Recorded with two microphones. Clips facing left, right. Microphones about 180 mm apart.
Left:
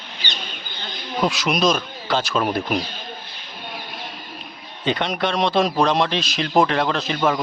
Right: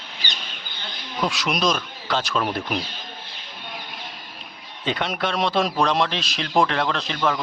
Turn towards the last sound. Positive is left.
turn(degrees=5)  # may be behind; listen again after turning